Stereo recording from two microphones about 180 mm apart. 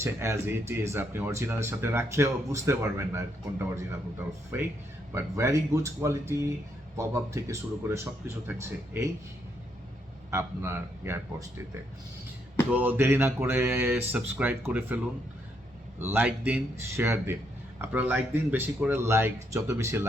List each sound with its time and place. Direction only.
0.0 s speech: 15° right (ahead or behind)
10.3 s speech: 15° right (ahead or behind)
12.7 s speech: 10° right (ahead or behind)
16.0 s speech: 10° right (ahead or behind)